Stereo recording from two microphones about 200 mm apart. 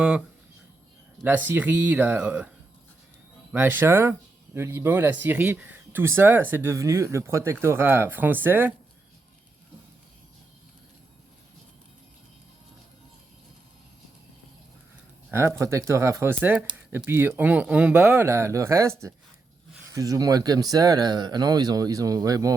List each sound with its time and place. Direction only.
1.2 s speech: 10° right (ahead or behind)
3.5 s speech: 10° right (ahead or behind)
15.3 s speech: 10° right (ahead or behind)